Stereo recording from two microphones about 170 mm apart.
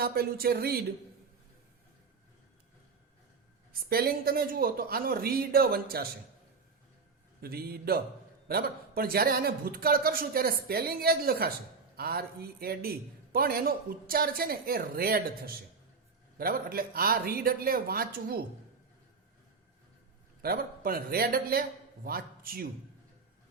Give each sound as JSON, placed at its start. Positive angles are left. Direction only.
{"t": 0.0, "sound": "a man's voice", "side_deg": -65}
{"t": 3.7, "sound": "a man's voice", "side_deg": -60}
{"t": 7.4, "sound": "a man's voice", "side_deg": -65}
{"t": 20.4, "sound": "a man's voice", "side_deg": -60}